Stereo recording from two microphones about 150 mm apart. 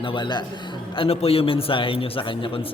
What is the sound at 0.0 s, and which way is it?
A man's voice, 35° left (ahead or behind).